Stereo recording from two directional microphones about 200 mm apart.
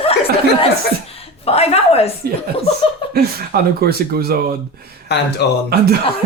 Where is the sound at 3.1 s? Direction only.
50° right (ahead or behind).